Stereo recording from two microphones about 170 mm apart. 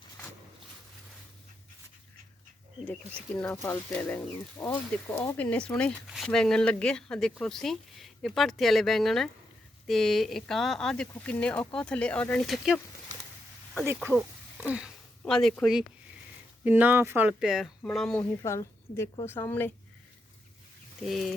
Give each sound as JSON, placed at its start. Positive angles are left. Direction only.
{"t": 3.2, "sound": "speech", "side_deg": 5}
{"t": 13.8, "sound": "speech", "side_deg": -15}
{"t": 14.1, "sound": "speech", "side_deg": 0}
{"t": 16.6, "sound": "speech", "side_deg": -10}
{"t": 18.4, "sound": "a woman's voice", "side_deg": 15}
{"t": 21.0, "sound": "speech", "side_deg": 0}